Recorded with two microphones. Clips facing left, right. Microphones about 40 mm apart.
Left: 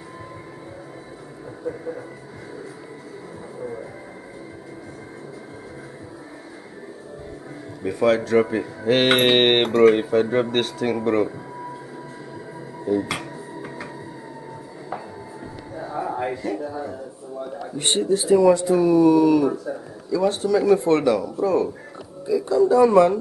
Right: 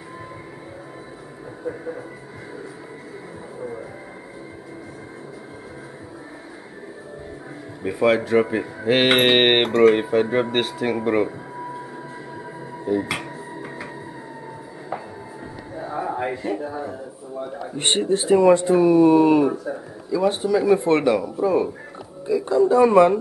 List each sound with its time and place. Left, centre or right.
1.7 s speech: centre
7.8 s speech: centre
12.8 s finger snapping: centre
15.7 s a sound: centre
17.7 s speech: right